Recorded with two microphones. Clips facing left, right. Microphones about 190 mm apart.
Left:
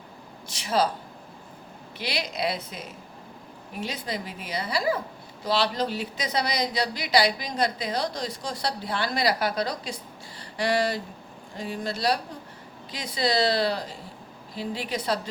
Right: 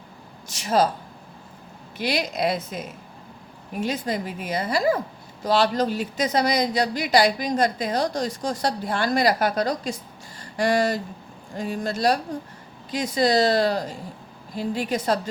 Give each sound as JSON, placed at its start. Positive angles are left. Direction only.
{"t": 0.4, "sound": "speech", "side_deg": -45}
{"t": 2.0, "sound": "speech", "side_deg": -45}